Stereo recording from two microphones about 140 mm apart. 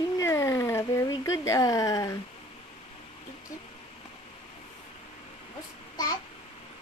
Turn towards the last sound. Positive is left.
turn(degrees=25)  # may be behind; listen again after turning